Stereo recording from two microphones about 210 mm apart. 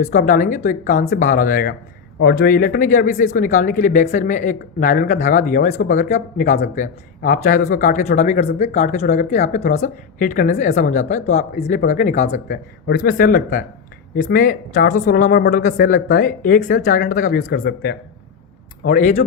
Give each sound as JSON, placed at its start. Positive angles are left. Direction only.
{"t": 0.0, "sound": "speech", "side_deg": 40}
{"t": 17.6, "sound": "speech", "side_deg": 60}
{"t": 18.9, "sound": "speech", "side_deg": 40}